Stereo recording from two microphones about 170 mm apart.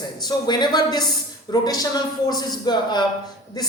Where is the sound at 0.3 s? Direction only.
25° left (ahead or behind).